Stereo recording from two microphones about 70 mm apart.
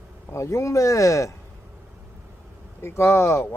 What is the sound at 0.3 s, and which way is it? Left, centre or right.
Speech, left.